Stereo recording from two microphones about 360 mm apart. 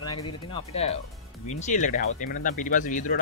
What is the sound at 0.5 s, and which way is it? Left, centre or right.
Speech, centre.